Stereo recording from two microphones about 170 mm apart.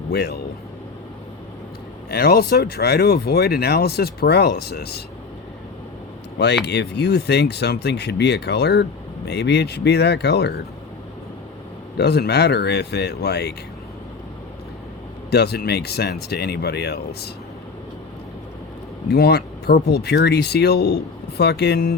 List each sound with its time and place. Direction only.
0.1 s speech: 70° left (ahead or behind)
2.0 s speech: 65° left (ahead or behind)
6.7 s speech: 80° left
11.9 s speech: 75° left (ahead or behind)
15.3 s speech: 70° left (ahead or behind)
19.0 s speech: 70° left (ahead or behind)